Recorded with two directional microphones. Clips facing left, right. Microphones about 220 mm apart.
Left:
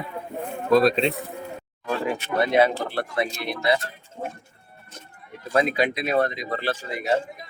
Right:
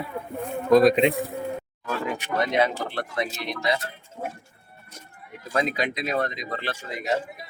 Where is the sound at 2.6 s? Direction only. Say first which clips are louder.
Left 5 dB; 30° left (ahead or behind).